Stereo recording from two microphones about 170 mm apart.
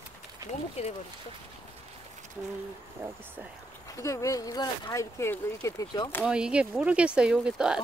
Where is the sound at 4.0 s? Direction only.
20° left (ahead or behind).